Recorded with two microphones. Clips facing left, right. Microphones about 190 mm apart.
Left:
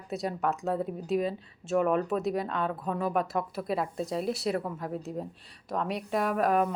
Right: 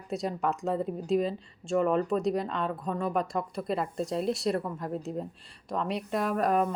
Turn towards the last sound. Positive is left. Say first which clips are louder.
# even
turn(degrees=0)  # may be behind; listen again after turning